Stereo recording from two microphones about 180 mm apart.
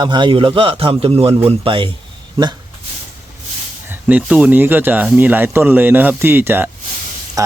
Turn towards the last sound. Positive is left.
turn(degrees=-20)  # may be behind; listen again after turning